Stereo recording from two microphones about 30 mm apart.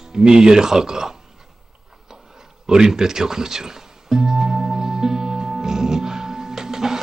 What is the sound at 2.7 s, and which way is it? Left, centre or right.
Music, right.